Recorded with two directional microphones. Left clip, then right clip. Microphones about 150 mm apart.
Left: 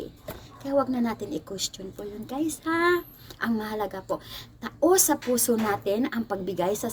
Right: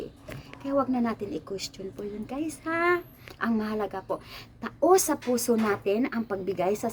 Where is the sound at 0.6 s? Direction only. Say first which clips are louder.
Left 1 dB; 15° right (ahead or behind).